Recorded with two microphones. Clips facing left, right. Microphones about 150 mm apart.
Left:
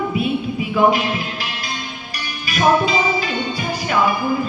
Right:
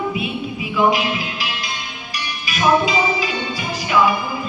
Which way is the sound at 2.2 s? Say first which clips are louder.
Left 1 dB; 45° left (ahead or behind).